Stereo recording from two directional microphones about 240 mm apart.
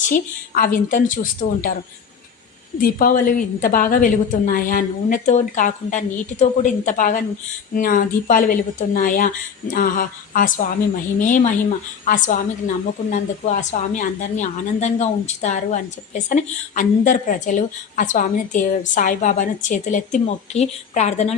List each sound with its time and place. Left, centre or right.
0.1 s a woman's voice: left
2.8 s a woman's voice: left